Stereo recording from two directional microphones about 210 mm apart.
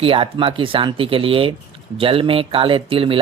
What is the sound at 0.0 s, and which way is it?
Speech, 25° right (ahead or behind).